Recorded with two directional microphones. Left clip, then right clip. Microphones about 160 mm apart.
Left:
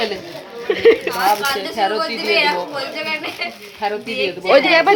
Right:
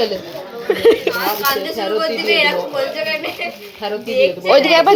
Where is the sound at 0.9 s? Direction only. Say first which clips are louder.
Even; 20° right (ahead or behind).